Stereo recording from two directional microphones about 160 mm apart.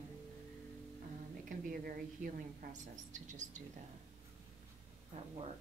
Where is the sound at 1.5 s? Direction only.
60° right (ahead or behind).